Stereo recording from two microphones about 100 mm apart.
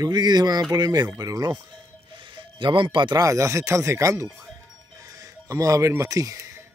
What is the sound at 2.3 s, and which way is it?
Speech, 55° right (ahead or behind).